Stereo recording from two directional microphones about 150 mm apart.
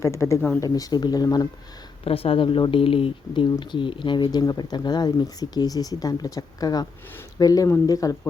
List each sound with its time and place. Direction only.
0.0 s speech: 20° left (ahead or behind)
2.0 s speech: 40° left (ahead or behind); by 8.3 s 25° left (ahead or behind)